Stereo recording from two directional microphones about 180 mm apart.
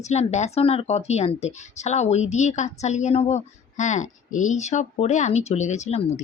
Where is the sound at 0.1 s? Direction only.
40° left (ahead or behind).